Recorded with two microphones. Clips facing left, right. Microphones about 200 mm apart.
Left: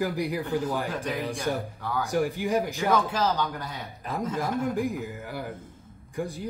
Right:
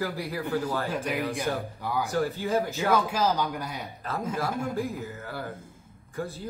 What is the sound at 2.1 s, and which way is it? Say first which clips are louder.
Speech: left 3 dB; 15° left (ahead or behind).